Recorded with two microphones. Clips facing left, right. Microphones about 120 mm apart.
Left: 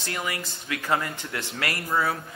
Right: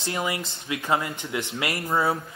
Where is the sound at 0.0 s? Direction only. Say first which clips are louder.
Right 3 dB; 20° right (ahead or behind).